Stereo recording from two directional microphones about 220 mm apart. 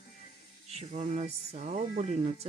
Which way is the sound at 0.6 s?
30° right (ahead or behind).